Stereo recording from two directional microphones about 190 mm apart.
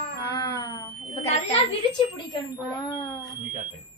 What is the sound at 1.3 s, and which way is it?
Speech, 30° left (ahead or behind).